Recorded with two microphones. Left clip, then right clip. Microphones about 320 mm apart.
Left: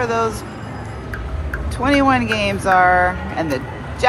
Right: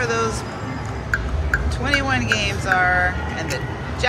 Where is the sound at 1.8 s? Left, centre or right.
Centre.